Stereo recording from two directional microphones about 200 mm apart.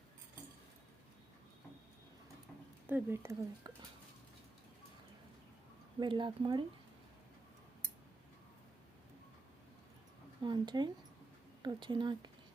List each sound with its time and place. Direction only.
2.8 s speech: 10° right (ahead or behind)
6.0 s speech: 25° right (ahead or behind)
10.4 s speech: 20° right (ahead or behind)